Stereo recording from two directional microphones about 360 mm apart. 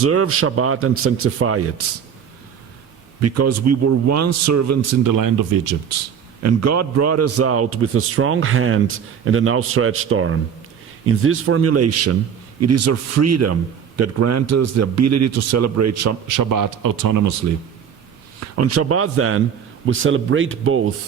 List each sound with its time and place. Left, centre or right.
0.0 s a man's voice: right
3.2 s a man's voice: right
6.4 s a man's voice: right
18.3 s a man's voice: right